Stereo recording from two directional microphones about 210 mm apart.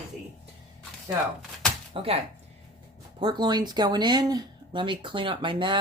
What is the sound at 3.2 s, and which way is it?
Speech, 20° right (ahead or behind).